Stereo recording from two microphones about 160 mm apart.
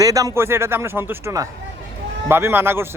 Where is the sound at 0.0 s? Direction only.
20° right (ahead or behind).